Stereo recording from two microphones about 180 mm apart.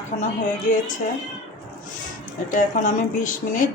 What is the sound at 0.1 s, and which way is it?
Speech, 40° left (ahead or behind).